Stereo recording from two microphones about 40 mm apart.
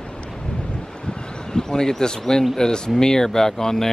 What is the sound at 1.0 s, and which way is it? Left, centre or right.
Speech, centre.